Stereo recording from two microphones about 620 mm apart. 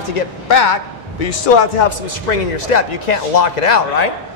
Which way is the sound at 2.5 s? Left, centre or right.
Left.